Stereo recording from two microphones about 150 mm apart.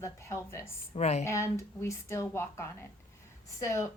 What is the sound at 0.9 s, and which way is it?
Speech, 45° left (ahead or behind).